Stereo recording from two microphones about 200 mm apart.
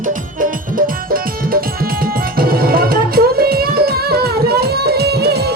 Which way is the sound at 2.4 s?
50° right (ahead or behind).